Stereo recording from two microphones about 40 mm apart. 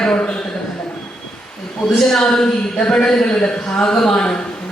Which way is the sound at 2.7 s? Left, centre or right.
Left.